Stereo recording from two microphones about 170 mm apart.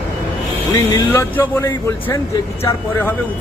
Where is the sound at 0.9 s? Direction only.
15° left (ahead or behind).